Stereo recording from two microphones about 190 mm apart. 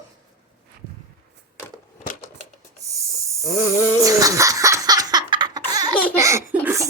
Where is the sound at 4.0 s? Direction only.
15° right (ahead or behind).